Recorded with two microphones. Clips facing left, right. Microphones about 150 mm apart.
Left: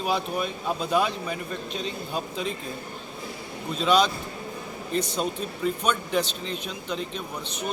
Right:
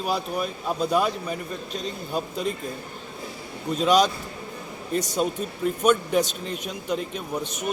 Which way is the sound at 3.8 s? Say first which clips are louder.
Right 2 dB; 45° right (ahead or behind).